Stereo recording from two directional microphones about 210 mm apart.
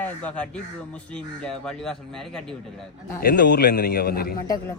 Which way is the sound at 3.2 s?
45° left (ahead or behind).